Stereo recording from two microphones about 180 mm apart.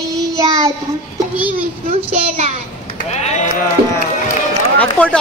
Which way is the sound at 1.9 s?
35° right (ahead or behind).